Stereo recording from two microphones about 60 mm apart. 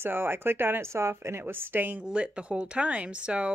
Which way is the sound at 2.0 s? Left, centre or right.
Centre.